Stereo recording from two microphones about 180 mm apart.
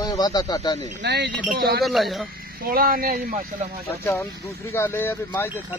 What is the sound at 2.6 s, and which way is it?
Speech, 55° right (ahead or behind).